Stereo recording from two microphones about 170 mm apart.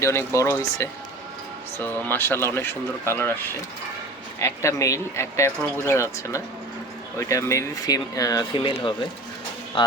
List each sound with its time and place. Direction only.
0.0 s speech: 15° left (ahead or behind)